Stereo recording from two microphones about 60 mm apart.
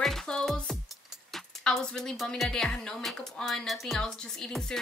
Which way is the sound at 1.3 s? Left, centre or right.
Centre.